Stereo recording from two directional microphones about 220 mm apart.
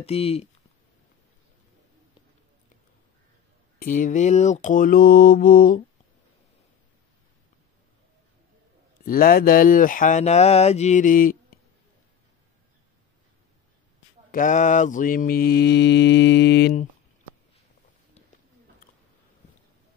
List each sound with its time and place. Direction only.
0.0 s speech: 25° left (ahead or behind)
3.8 s speech: 35° left (ahead or behind)
9.0 s speech: 40° left (ahead or behind)
14.3 s mantra: 35° left (ahead or behind)